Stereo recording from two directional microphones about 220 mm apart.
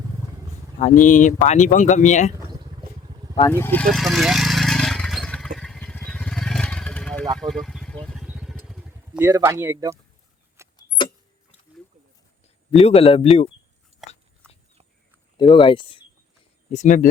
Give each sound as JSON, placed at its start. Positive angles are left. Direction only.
{"t": 0.8, "sound": "speech", "side_deg": 35}
{"t": 3.3, "sound": "a sound", "side_deg": 15}
{"t": 7.3, "sound": "vehicle", "side_deg": 0}
{"t": 10.8, "sound": "vehicle", "side_deg": 20}
{"t": 12.8, "sound": "speech", "side_deg": 25}
{"t": 13.9, "sound": "biting", "side_deg": -30}
{"t": 14.4, "sound": "a sound", "side_deg": 5}
{"t": 15.4, "sound": "speech", "side_deg": 20}
{"t": 16.6, "sound": "speech", "side_deg": 35}